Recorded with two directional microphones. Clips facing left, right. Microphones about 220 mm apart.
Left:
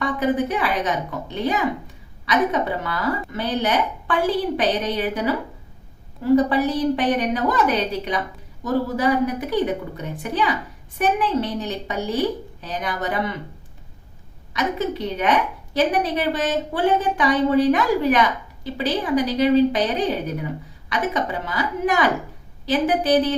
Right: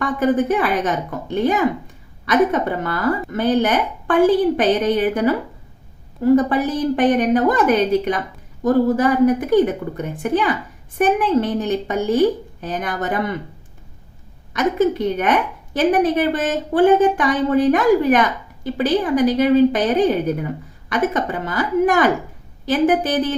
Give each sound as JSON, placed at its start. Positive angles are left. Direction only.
{"t": 0.0, "sound": "a woman's voice", "side_deg": -50}
{"t": 6.3, "sound": "a woman's voice", "side_deg": -50}
{"t": 14.5, "sound": "a woman's voice", "side_deg": -50}